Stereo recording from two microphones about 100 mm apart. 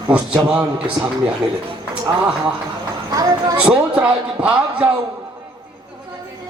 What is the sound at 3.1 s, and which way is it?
Speech, 40° right (ahead or behind).